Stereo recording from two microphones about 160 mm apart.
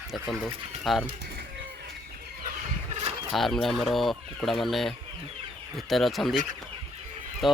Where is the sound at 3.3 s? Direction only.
Centre (ahead or behind).